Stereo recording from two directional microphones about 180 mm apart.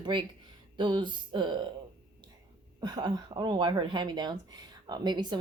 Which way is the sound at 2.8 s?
25° right (ahead or behind).